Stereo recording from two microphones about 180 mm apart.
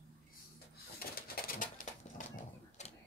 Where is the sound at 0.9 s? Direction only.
55° left (ahead or behind).